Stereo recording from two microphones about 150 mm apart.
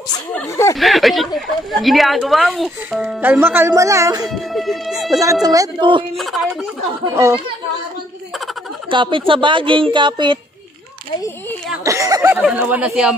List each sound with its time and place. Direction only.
0.3 s speech: 15° left (ahead or behind)
0.7 s a woman's voice: centre (ahead or behind); by 4.3 s 25° right (ahead or behind)
4.3 s a woman's voice: centre (ahead or behind)
5.2 s speech: 20° right (ahead or behind)
6.1 s a woman's voice: centre (ahead or behind)
8.9 s a woman's voice: 35° right (ahead or behind)
11.8 s speech: 20° right (ahead or behind)
12.4 s speech: 10° right (ahead or behind)